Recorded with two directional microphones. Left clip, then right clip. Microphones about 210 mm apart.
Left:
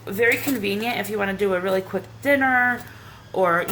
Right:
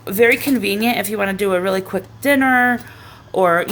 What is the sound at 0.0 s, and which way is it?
Speech, 50° right (ahead or behind).